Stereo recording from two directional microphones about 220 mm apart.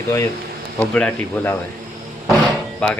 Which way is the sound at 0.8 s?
5° left (ahead or behind).